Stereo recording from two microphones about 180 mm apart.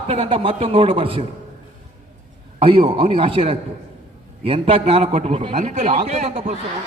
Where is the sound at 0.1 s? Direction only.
30° right (ahead or behind).